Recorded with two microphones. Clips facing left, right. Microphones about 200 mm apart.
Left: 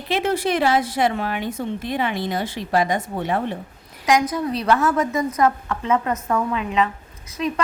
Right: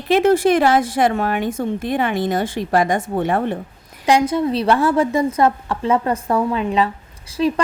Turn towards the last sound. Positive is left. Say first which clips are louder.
# right 5 dB
turn(degrees=-30)  # may be behind; listen again after turning